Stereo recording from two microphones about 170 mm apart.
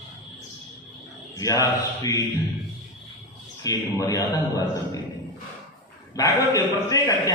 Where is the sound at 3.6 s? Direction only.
20° left (ahead or behind).